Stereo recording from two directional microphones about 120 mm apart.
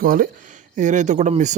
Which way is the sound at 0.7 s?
90° right.